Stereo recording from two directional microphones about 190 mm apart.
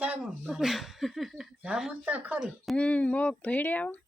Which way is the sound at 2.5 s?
5° left (ahead or behind).